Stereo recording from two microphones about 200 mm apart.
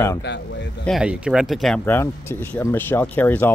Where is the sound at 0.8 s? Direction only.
5° right (ahead or behind).